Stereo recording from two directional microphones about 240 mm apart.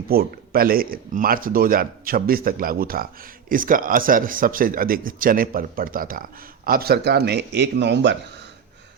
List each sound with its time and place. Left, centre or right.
0.1 s a man's voice: right